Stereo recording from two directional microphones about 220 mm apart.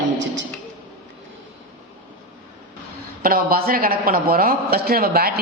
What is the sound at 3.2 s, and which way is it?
Speech, 40° right (ahead or behind).